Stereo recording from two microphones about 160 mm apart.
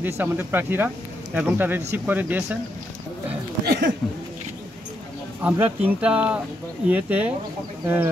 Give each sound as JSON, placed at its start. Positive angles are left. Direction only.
{"t": 0.0, "sound": "speech", "side_deg": -15}
{"t": 3.6, "sound": "speech", "side_deg": -85}
{"t": 5.4, "sound": "speech", "side_deg": -10}